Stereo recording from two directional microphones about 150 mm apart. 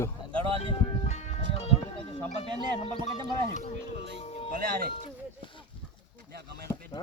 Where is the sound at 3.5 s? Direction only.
45° left (ahead or behind).